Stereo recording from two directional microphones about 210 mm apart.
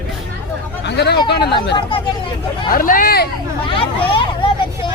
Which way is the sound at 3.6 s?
25° left (ahead or behind).